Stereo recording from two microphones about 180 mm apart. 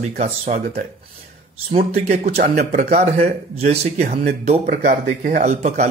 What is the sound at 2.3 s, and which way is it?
Speech, 45° right (ahead or behind).